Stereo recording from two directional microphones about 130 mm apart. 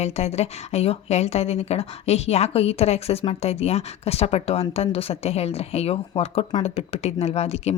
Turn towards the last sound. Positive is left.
turn(degrees=55)  # may be behind; listen again after turning